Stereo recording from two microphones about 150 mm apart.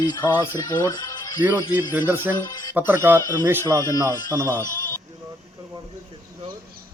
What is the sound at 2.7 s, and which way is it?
Speech, 15° right (ahead or behind).